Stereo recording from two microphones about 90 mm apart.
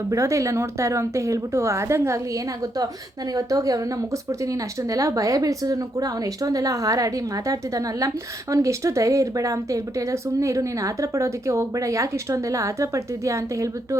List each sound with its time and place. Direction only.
0.1 s speech: 35° right (ahead or behind)